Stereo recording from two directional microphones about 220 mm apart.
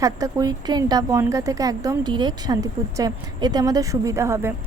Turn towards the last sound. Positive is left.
turn(degrees=-10)  # may be behind; listen again after turning